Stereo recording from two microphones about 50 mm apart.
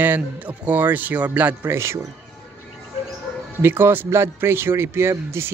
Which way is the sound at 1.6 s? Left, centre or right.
Right.